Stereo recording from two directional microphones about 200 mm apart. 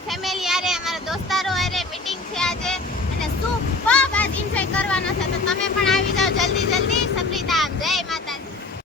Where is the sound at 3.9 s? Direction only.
5° left (ahead or behind).